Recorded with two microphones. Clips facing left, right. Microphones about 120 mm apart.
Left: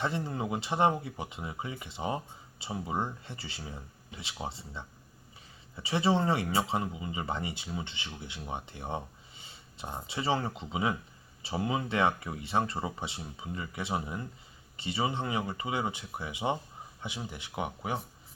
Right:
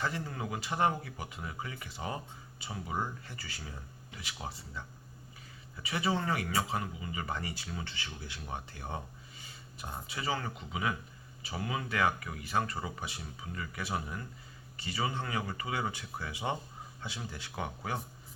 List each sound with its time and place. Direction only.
0.0 s speech: 25° left (ahead or behind)